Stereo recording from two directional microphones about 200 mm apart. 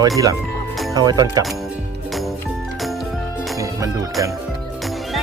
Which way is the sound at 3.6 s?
15° right (ahead or behind).